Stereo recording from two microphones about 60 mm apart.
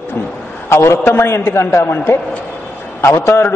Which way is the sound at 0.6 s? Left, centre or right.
Left.